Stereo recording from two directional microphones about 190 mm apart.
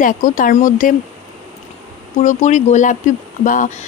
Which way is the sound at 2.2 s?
40° left (ahead or behind).